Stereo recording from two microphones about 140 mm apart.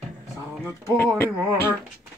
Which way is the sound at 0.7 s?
15° left (ahead or behind).